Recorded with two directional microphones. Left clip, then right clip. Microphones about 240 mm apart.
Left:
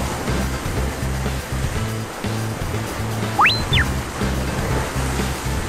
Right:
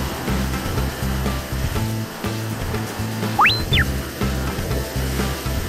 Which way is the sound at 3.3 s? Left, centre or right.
Centre.